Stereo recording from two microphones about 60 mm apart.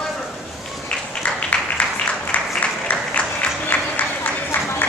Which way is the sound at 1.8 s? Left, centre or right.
Left.